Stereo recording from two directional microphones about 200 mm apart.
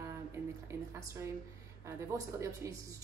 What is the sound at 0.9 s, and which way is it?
A woman's voice, 15° right (ahead or behind).